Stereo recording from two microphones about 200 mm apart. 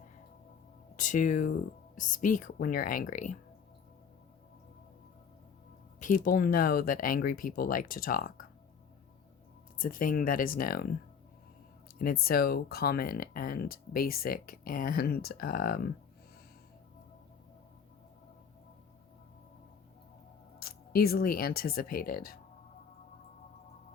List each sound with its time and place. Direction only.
0.9 s speech: 40° left (ahead or behind)
6.0 s speech: 45° left (ahead or behind)
9.7 s speech: 45° left (ahead or behind)
12.2 s speech: 50° left (ahead or behind)
20.6 s speech: 50° left (ahead or behind)